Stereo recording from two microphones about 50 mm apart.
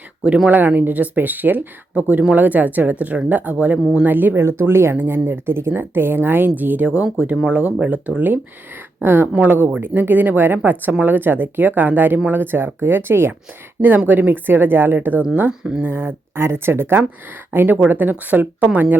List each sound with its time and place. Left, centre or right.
0.5 s speech: right
4.4 s speech: right
4.9 s speech: right
6.8 s speech: right
9.0 s speech: right
13.8 s speech: right